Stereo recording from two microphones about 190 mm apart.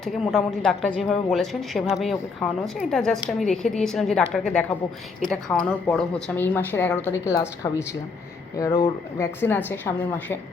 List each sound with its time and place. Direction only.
0.0 s a woman's voice: centre (ahead or behind)